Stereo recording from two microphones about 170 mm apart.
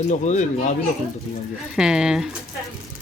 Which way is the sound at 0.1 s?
45° left (ahead or behind).